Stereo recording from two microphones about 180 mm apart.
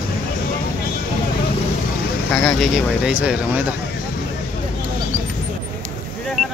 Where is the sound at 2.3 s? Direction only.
5° left (ahead or behind).